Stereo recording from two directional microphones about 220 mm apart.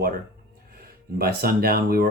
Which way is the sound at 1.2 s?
45° right (ahead or behind).